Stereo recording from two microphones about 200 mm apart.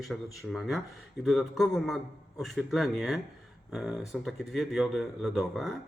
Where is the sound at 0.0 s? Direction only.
Centre (ahead or behind).